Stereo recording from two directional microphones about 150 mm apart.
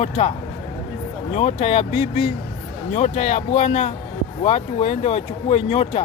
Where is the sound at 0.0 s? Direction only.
45° left (ahead or behind).